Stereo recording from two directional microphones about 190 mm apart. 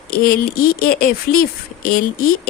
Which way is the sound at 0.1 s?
50° left (ahead or behind).